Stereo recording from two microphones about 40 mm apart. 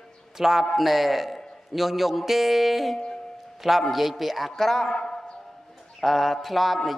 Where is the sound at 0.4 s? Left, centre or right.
Centre.